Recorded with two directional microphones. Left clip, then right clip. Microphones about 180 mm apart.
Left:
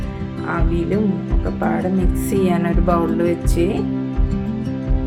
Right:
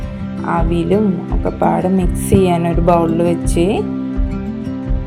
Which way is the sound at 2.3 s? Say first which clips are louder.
Right 6 dB; 25° right (ahead or behind).